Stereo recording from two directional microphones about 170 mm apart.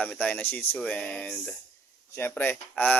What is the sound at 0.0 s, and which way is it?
Speech, 10° left (ahead or behind).